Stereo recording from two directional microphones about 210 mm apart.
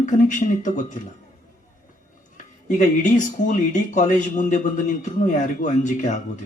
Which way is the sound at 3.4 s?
40° left (ahead or behind).